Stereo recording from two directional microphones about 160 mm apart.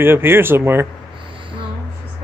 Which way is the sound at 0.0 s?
15° right (ahead or behind).